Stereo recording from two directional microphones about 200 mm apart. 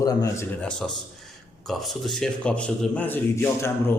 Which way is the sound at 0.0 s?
20° left (ahead or behind).